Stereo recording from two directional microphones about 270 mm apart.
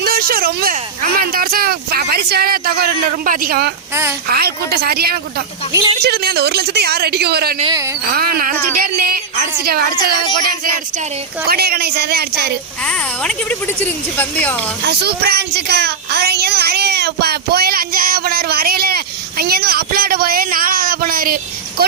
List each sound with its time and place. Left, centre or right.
0.0 s speech: right
5.7 s speech: centre
6.0 s speech: right
7.6 s speech: centre
8.0 s speech: right
11.4 s speech: right
12.8 s speech: centre
14.8 s speech: right